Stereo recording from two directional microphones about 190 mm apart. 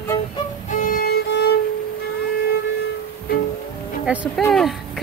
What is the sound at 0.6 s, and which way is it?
Violin, 45° left (ahead or behind).